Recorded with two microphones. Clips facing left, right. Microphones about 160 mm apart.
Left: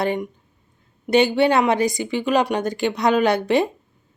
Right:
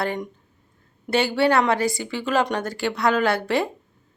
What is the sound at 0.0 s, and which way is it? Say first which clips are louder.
A woman's voice: left 4 dB; 15° left (ahead or behind).